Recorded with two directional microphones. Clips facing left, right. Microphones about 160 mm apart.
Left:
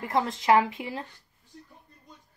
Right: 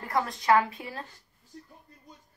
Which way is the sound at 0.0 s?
20° left (ahead or behind).